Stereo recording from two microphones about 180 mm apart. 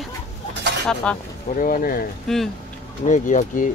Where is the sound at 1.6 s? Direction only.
50° left (ahead or behind).